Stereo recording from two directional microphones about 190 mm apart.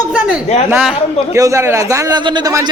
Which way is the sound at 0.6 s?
10° right (ahead or behind).